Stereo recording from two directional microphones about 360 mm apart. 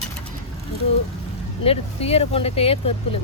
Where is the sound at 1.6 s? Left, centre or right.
Centre.